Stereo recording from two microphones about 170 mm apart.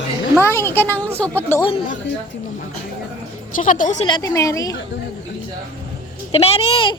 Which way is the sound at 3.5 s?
50° left (ahead or behind).